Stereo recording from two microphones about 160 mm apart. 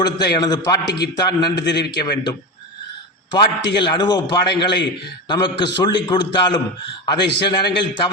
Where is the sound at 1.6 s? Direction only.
90° left.